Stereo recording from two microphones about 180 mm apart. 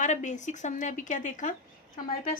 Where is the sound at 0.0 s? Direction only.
45° left (ahead or behind).